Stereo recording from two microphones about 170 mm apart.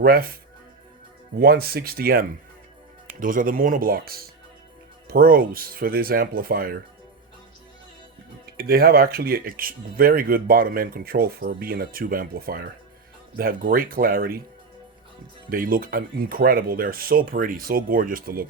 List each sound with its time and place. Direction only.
0.0 s speech: 60° right (ahead or behind)
1.4 s speech: 65° right (ahead or behind)
8.5 s speech: 60° right (ahead or behind)
15.4 s speech: 55° right (ahead or behind)